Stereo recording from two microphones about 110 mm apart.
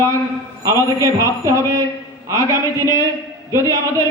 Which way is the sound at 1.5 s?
30° right (ahead or behind).